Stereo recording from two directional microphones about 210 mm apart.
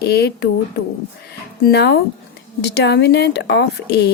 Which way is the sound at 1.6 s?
50° left (ahead or behind).